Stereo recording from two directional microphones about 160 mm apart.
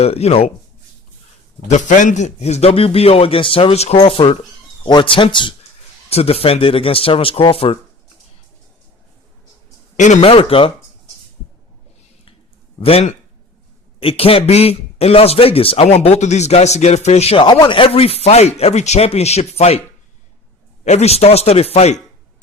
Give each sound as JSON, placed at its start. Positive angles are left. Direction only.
{"t": 0.0, "sound": "a man's voice", "side_deg": 40}
{"t": 1.6, "sound": "a man's voice", "side_deg": 50}
{"t": 10.0, "sound": "speech", "side_deg": 45}
{"t": 10.2, "sound": "a man's voice", "side_deg": 35}
{"t": 12.8, "sound": "a man's voice", "side_deg": 40}
{"t": 20.8, "sound": "a man's voice", "side_deg": 45}